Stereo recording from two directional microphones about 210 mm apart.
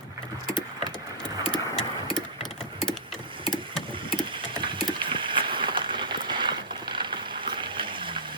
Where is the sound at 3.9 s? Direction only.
25° right (ahead or behind).